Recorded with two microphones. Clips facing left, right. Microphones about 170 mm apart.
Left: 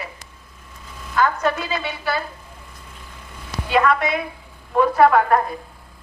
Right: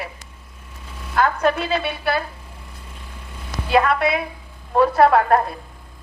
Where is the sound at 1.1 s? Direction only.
60° right (ahead or behind).